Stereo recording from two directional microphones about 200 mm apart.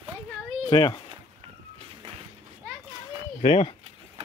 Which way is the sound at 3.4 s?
30° left (ahead or behind).